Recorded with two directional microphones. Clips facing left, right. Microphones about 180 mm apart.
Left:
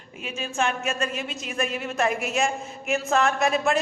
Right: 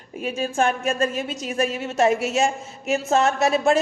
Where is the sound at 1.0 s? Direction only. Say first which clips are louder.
Right 5 dB; 30° right (ahead or behind).